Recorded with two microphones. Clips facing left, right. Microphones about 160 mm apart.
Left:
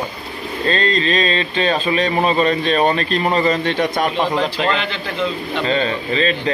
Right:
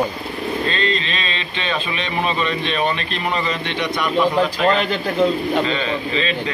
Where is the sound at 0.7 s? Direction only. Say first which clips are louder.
Left 5 dB; 40° left (ahead or behind).